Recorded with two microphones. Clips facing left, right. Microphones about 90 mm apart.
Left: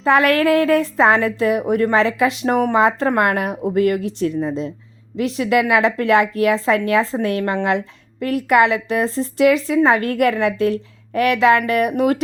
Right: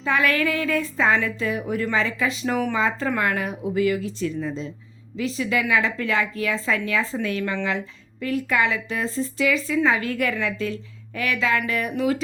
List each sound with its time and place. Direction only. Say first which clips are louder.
0.0 s a woman's voice: left 7 dB; 65° left (ahead or behind)